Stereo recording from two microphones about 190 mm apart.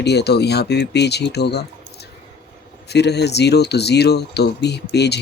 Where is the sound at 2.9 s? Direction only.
60° left (ahead or behind).